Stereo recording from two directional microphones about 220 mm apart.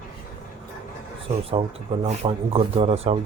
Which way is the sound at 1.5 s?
25° right (ahead or behind).